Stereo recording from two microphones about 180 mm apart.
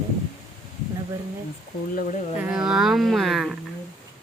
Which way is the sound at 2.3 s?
5° right (ahead or behind).